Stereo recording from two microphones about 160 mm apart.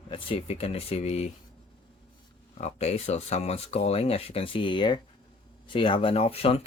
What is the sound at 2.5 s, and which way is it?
Speech, 40° left (ahead or behind).